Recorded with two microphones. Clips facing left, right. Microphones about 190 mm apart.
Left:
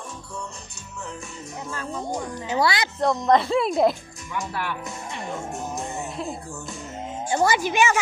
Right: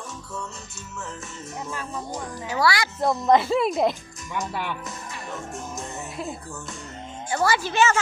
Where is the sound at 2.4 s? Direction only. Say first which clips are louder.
Even; 20° left (ahead or behind).